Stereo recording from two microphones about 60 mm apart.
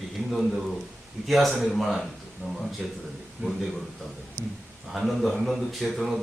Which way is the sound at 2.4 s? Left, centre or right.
Right.